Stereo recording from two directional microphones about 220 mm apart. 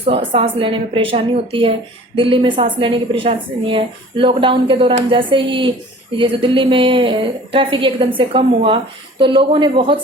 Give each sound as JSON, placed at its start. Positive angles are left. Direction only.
{"t": 0.1, "sound": "a woman's voice", "side_deg": -25}